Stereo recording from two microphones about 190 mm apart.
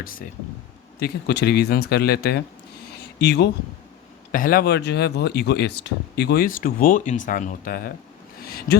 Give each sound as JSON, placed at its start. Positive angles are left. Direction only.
{"t": 0.9, "sound": "a man's voice", "side_deg": 60}
{"t": 4.3, "sound": "speech", "side_deg": 45}